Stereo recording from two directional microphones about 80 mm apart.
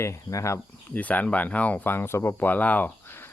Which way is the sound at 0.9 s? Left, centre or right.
Centre.